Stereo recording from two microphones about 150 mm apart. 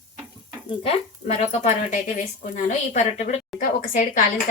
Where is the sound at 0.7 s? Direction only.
40° left (ahead or behind).